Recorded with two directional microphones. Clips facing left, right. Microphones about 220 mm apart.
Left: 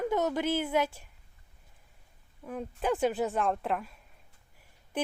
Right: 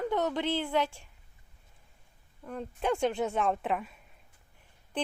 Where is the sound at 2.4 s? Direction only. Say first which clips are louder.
Even; 5° left (ahead or behind).